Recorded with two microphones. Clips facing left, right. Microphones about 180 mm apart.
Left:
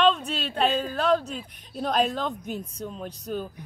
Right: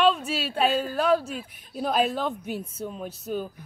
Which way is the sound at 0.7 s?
20° left (ahead or behind).